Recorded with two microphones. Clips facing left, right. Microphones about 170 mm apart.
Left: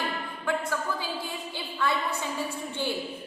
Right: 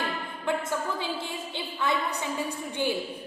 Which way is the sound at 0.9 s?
25° right (ahead or behind).